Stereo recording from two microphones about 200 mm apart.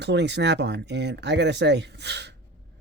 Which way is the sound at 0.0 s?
60° right (ahead or behind).